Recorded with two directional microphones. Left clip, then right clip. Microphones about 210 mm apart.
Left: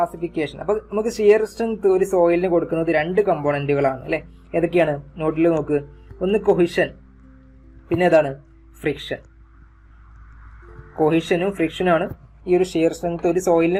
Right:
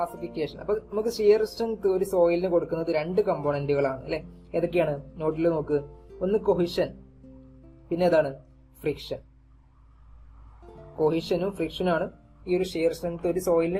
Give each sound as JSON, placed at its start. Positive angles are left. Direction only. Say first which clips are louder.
{"t": 0.0, "sound": "speech", "louder": "left 7 dB", "side_deg": 25}
{"t": 11.0, "sound": "speech", "louder": "left 6 dB", "side_deg": 20}